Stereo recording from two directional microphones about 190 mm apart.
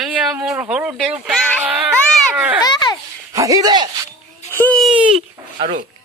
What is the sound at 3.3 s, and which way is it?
Speech, 15° right (ahead or behind).